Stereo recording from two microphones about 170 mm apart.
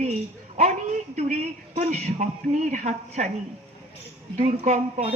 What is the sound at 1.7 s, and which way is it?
A woman's voice, 45° right (ahead or behind).